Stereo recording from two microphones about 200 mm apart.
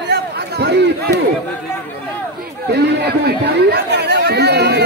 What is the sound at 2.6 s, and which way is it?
Chatter, 55° right (ahead or behind).